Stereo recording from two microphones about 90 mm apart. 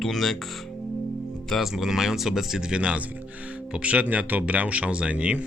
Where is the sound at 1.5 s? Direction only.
Centre (ahead or behind).